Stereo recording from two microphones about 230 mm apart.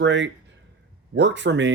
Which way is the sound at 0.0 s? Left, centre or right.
Right.